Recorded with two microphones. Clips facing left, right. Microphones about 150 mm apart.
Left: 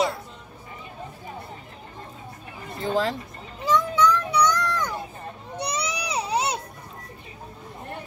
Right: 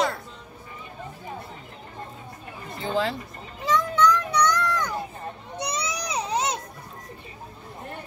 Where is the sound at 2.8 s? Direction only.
40° left (ahead or behind).